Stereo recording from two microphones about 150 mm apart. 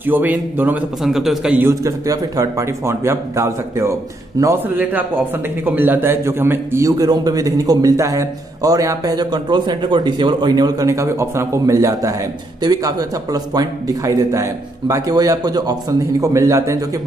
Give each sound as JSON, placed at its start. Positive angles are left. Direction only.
{"t": 0.0, "sound": "a man's voice", "side_deg": -10}
{"t": 1.6, "sound": "a man's voice", "side_deg": -20}